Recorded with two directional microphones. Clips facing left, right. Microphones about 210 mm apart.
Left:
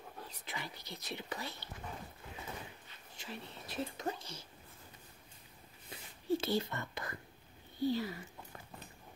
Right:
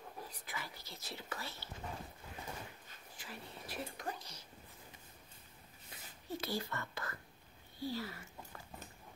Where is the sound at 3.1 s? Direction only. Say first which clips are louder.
Left 4 dB; 25° left (ahead or behind).